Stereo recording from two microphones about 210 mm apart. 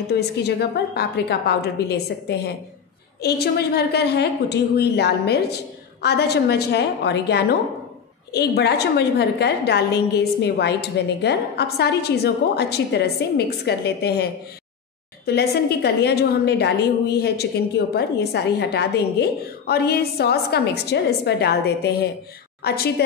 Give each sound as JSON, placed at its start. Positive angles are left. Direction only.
{"t": 0.1, "sound": "a woman's voice", "side_deg": 50}